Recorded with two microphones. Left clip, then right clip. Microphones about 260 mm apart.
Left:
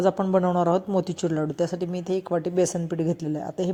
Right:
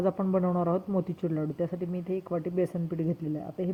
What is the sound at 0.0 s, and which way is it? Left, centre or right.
A woman's voice, centre.